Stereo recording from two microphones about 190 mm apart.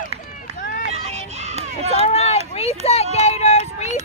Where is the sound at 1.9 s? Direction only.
35° left (ahead or behind).